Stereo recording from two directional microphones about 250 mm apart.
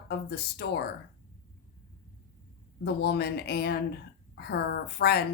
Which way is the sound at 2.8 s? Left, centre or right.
Left.